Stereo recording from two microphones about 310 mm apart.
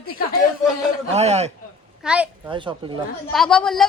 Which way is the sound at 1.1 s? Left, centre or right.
Right.